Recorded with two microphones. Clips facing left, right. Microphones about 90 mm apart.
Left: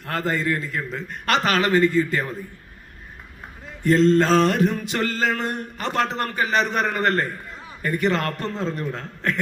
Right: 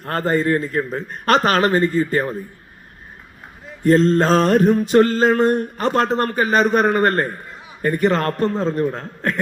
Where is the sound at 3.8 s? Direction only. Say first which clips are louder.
Right 2 dB; 40° right (ahead or behind).